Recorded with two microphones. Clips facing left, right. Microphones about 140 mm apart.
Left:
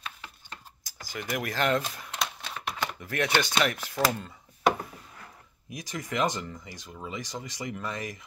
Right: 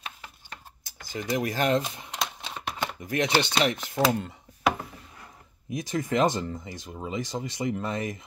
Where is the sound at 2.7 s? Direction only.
15° right (ahead or behind).